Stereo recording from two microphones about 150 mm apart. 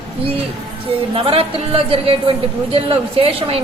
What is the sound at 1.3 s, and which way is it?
A woman's voice, 40° right (ahead or behind).